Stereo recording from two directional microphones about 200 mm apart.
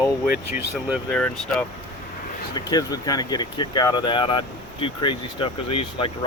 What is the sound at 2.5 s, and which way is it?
Speech, 20° left (ahead or behind).